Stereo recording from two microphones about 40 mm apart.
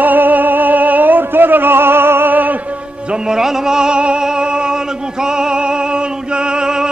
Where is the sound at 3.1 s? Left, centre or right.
Centre.